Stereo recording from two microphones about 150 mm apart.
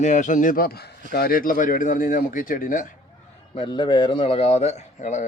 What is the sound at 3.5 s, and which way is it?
A man's voice, 30° left (ahead or behind).